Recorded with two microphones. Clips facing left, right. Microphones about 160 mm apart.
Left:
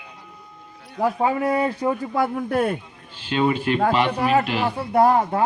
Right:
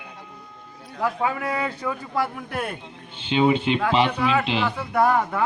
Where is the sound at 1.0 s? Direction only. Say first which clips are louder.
Left 4 dB; 30° left (ahead or behind).